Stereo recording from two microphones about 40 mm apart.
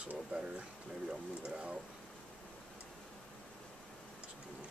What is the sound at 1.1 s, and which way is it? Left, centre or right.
Speech, right.